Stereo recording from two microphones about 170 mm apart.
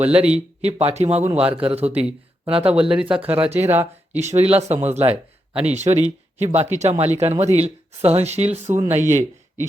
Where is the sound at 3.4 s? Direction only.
40° right (ahead or behind).